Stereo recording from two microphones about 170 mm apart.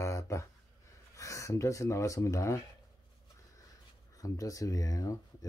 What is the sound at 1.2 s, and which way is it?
Speech, 20° left (ahead or behind).